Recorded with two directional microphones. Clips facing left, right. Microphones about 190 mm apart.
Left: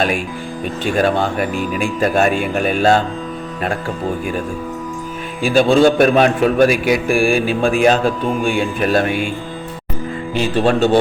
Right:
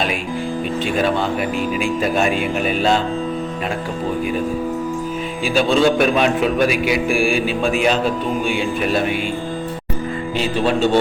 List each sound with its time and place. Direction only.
1.0 s a man's voice: 50° left (ahead or behind)
5.4 s a man's voice: 50° left (ahead or behind)
10.3 s a man's voice: 45° left (ahead or behind)